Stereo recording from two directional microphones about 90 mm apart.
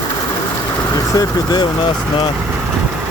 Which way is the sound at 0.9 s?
40° left (ahead or behind).